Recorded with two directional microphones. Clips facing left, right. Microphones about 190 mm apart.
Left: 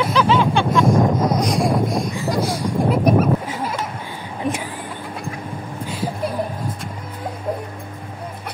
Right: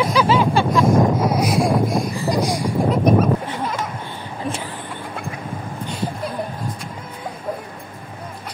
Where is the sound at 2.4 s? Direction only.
15° right (ahead or behind).